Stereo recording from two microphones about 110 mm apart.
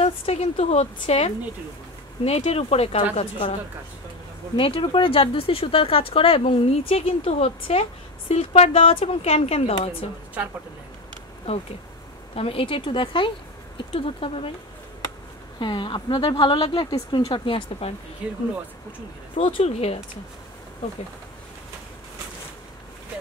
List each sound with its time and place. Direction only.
0.0 s speech: 70° left (ahead or behind)
4.6 s speech: 55° left (ahead or behind)
10.4 s speech: 15° right (ahead or behind)
11.5 s speech: 60° left (ahead or behind)
15.6 s speech: 45° left (ahead or behind)
19.3 s speech: 60° left (ahead or behind)